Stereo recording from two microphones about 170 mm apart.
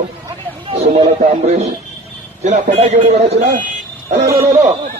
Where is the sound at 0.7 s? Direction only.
35° right (ahead or behind).